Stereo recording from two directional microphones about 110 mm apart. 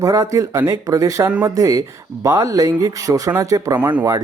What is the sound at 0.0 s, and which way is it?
Speech, 30° right (ahead or behind).